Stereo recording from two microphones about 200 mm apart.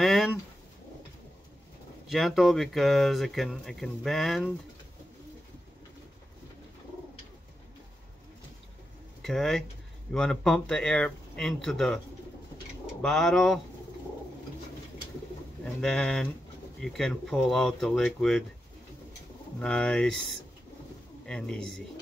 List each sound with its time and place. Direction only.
0.0 s a sound: centre (ahead or behind)
2.0 s speech: centre (ahead or behind)
9.2 s speech: centre (ahead or behind)
13.0 s speech: centre (ahead or behind)
15.6 s speech: 5° left (ahead or behind)
19.6 s speech: 5° left (ahead or behind)